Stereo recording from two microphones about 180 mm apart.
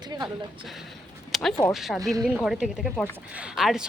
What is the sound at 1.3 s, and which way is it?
A woman's voice, centre (ahead or behind).